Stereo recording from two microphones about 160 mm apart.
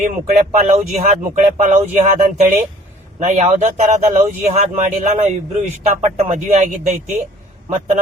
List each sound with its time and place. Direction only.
0.0 s speech: 45° right (ahead or behind)